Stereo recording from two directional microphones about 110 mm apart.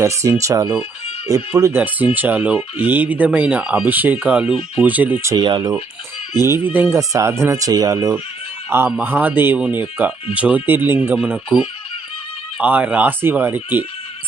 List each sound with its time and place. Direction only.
0.0 s speech: 25° right (ahead or behind)
2.1 s speech: 15° right (ahead or behind)
5.4 s speech: 40° right (ahead or behind)
6.7 s speech: 15° right (ahead or behind)
9.0 s speech: 15° right (ahead or behind)